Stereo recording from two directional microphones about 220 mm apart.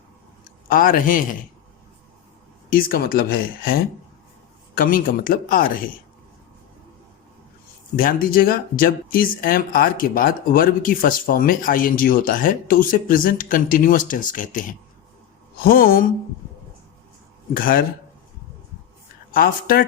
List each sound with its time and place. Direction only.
0.7 s speech: 40° left (ahead or behind)
2.6 s speech: 40° left (ahead or behind)
7.9 s speech: 40° left (ahead or behind)
17.5 s speech: 40° left (ahead or behind)
19.3 s speech: 40° left (ahead or behind)